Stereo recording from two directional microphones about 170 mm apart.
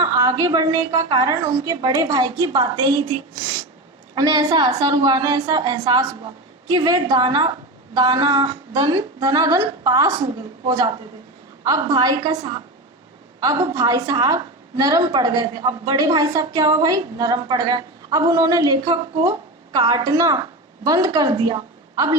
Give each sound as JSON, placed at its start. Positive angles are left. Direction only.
{"t": 0.0, "sound": "a woman's voice", "side_deg": -20}